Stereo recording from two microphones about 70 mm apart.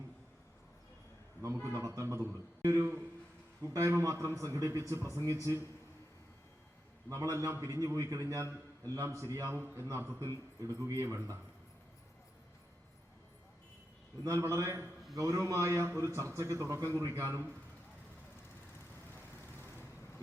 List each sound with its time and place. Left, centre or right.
1.8 s a man's voice: right
2.6 s a sound: right
3.6 s a man's voice: right
7.1 s a man's voice: right
14.3 s a man's voice: right
19.1 s vehicle: left